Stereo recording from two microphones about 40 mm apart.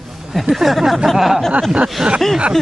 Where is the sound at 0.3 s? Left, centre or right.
Centre.